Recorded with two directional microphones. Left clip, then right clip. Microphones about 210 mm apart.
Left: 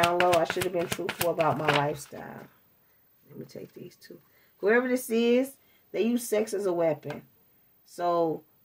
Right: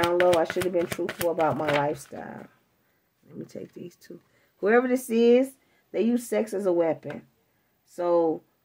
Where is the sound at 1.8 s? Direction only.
45° right (ahead or behind).